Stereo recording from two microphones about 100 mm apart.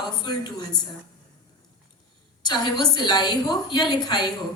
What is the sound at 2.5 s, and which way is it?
A woman's voice, 45° left (ahead or behind).